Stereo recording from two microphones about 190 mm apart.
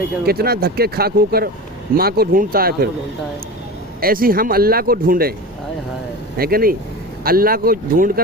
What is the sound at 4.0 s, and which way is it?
Speech, 50° right (ahead or behind).